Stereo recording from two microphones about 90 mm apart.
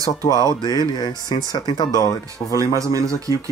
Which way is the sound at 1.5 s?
55° left (ahead or behind).